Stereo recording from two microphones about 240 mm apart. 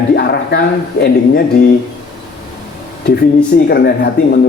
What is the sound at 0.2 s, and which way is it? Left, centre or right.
Speech, left.